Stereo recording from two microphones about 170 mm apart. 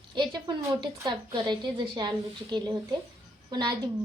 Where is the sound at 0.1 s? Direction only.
25° right (ahead or behind).